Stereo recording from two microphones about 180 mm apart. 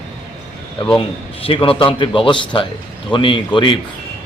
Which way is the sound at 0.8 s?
25° left (ahead or behind).